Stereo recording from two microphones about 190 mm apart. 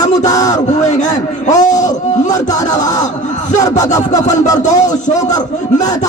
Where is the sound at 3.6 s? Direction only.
20° left (ahead or behind).